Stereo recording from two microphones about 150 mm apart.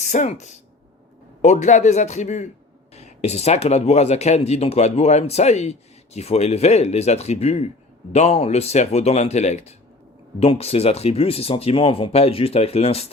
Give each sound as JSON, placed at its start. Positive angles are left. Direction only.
{"t": 0.0, "sound": "speech", "side_deg": 50}